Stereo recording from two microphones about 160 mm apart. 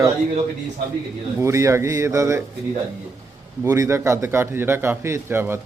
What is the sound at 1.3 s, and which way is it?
A man's voice, 15° right (ahead or behind).